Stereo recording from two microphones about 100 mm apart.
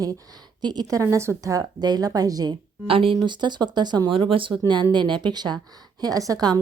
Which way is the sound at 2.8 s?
65° right (ahead or behind).